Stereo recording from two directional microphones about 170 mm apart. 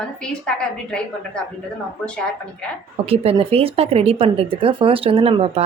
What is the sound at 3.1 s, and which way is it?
Speech, 35° right (ahead or behind).